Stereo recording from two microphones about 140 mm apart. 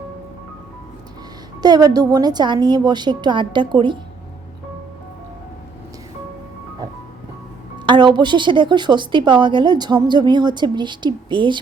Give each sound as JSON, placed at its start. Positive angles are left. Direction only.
{"t": 1.6, "sound": "a woman's voice", "side_deg": -30}
{"t": 7.9, "sound": "a woman's voice", "side_deg": -35}